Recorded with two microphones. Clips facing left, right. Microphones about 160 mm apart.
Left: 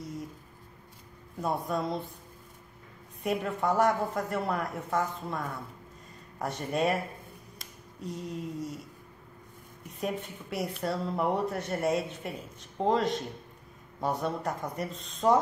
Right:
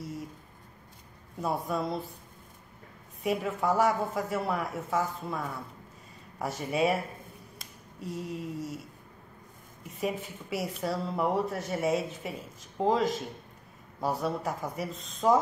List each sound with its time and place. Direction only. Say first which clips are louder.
1.4 s speech: even; 5° right (ahead or behind)
3.2 s speech: right 1 dB; 5° right (ahead or behind)
8.0 s speech: right 1 dB; 5° right (ahead or behind)
9.8 s speech: right 1 dB; 5° right (ahead or behind)